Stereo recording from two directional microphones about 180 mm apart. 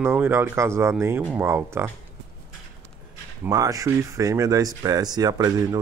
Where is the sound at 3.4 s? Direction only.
20° right (ahead or behind).